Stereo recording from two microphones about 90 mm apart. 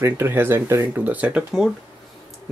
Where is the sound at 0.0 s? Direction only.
25° right (ahead or behind).